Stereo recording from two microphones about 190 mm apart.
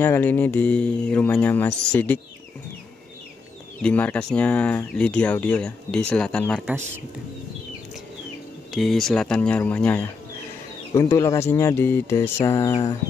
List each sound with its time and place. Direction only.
0.0 s speech: 10° left (ahead or behind)
3.8 s speech: 10° left (ahead or behind)
8.7 s speech: centre (ahead or behind)